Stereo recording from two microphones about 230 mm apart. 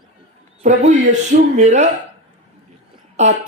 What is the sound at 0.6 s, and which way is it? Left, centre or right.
A man's voice, right.